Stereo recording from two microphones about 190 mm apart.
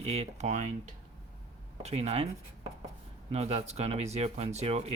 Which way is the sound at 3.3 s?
30° right (ahead or behind).